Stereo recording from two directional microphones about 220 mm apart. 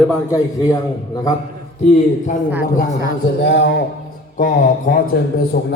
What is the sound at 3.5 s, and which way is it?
Speech, 50° left (ahead or behind).